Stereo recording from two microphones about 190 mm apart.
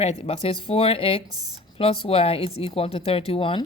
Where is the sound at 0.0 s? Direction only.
35° left (ahead or behind).